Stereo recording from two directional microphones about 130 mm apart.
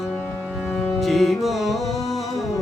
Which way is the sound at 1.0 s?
Centre (ahead or behind).